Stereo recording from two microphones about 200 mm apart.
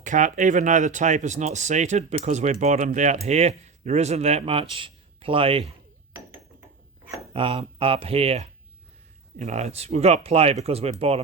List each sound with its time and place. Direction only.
0.0 s speech: 40° right (ahead or behind)
7.3 s speech: 30° right (ahead or behind)